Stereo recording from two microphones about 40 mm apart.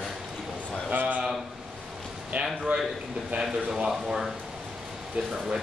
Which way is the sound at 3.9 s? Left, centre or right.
Centre.